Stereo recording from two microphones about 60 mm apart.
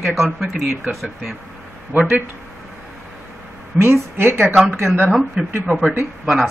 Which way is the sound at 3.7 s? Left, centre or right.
Right.